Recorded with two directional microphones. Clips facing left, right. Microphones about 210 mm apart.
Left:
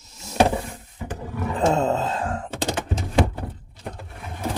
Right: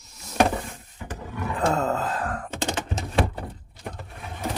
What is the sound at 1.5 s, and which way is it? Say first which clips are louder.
Gasp: left 3 dB; 25° left (ahead or behind).